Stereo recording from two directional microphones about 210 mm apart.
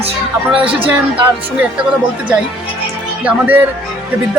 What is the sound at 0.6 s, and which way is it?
Speech, 25° right (ahead or behind).